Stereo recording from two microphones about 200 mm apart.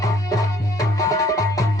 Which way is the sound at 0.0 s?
15° left (ahead or behind).